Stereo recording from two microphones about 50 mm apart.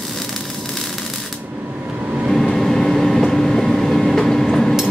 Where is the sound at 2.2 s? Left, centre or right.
Centre.